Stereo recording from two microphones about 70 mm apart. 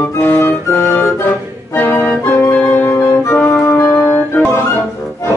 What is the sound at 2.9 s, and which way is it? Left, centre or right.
Music, left.